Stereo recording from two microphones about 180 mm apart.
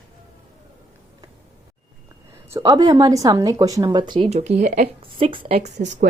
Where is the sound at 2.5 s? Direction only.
20° right (ahead or behind).